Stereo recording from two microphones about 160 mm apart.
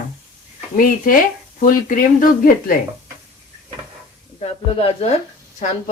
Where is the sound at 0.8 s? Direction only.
60° left (ahead or behind).